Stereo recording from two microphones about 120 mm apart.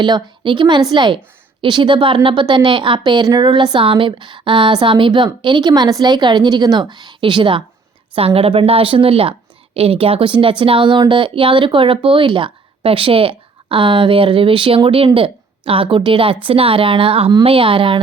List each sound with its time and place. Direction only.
0.0 s a woman's voice: 40° right (ahead or behind)